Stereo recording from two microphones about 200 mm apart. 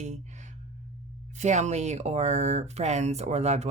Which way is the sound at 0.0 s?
35° right (ahead or behind).